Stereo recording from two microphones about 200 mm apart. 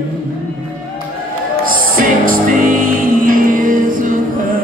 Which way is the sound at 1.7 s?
45° right (ahead or behind).